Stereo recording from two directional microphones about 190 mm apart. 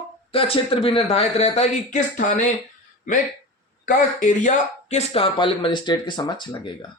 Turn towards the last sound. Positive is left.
turn(degrees=25)  # may be behind; listen again after turning